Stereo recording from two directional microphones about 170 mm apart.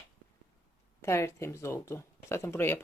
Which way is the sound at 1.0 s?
15° left (ahead or behind).